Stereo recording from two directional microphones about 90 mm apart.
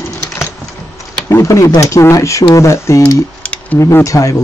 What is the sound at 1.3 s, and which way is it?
Speech, 35° left (ahead or behind).